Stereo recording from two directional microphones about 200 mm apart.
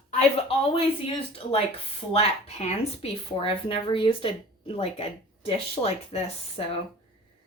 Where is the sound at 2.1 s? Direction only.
30° left (ahead or behind).